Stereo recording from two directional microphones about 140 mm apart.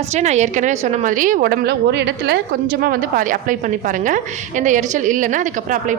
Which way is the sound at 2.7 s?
90° right.